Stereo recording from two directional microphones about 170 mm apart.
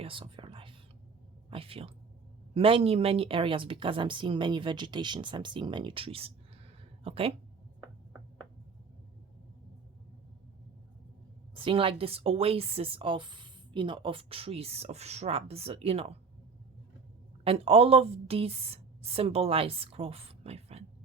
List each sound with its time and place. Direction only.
0.0 s whispering: 30° right (ahead or behind)
1.5 s a woman's voice: 35° right (ahead or behind)
11.5 s a woman's voice: 30° right (ahead or behind)
17.4 s a woman's voice: 35° right (ahead or behind)